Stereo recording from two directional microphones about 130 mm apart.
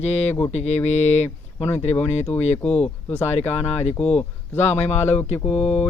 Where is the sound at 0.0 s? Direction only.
55° left (ahead or behind).